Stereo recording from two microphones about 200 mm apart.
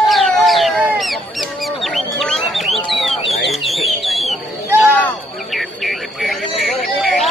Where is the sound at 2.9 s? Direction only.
Centre (ahead or behind).